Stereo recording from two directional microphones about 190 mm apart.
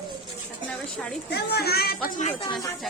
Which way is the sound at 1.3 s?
60° left (ahead or behind).